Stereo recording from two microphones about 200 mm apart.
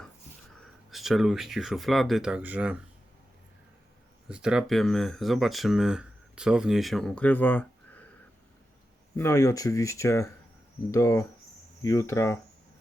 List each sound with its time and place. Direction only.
0.9 s speech: centre (ahead or behind)
4.3 s speech: 5° right (ahead or behind)
9.1 s speech: 15° left (ahead or behind)